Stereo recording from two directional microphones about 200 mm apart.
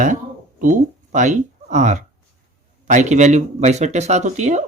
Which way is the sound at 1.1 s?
40° right (ahead or behind).